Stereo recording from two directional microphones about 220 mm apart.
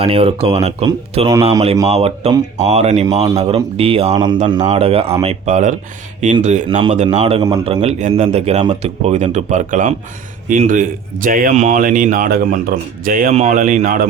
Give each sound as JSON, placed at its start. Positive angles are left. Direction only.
{"t": 0.0, "sound": "a man's voice", "side_deg": -25}